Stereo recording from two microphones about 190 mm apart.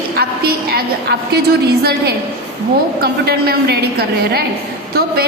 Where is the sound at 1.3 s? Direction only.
55° right (ahead or behind).